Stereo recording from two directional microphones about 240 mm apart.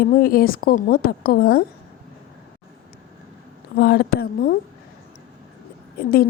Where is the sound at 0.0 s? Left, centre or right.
Left.